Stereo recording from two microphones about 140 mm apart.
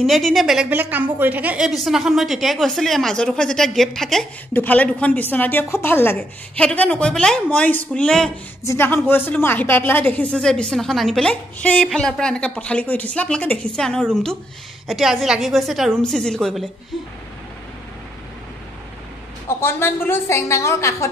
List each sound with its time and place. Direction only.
0.0 s a woman's voice: centre (ahead or behind)
19.6 s a woman's voice: 15° left (ahead or behind)